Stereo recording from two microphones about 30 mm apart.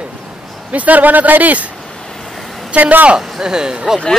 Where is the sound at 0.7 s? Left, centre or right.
Right.